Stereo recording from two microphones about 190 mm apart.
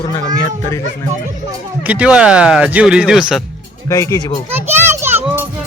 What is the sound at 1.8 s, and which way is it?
Speech, 5° right (ahead or behind).